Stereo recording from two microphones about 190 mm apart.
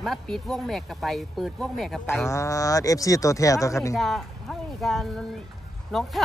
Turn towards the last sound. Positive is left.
turn(degrees=0)  # may be behind; listen again after turning